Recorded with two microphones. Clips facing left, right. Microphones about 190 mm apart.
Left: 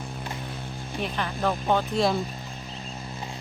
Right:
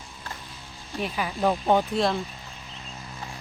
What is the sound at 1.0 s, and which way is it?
Speech, 5° right (ahead or behind).